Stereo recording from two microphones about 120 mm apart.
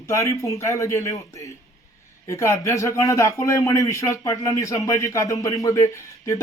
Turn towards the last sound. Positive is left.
turn(degrees=25)  # may be behind; listen again after turning